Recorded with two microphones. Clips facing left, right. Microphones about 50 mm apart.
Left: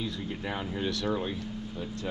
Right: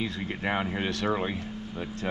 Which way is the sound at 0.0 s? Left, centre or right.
Right.